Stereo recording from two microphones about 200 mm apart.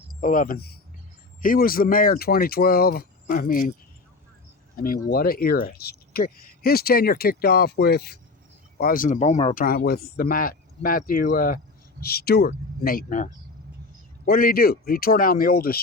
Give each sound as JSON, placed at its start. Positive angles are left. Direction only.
{"t": 0.2, "sound": "speech", "side_deg": 40}
{"t": 4.8, "sound": "speech", "side_deg": 45}
{"t": 9.6, "sound": "speech", "side_deg": 50}